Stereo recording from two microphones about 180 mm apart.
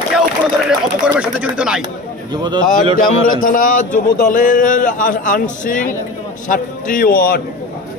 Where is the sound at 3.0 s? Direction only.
50° left (ahead or behind).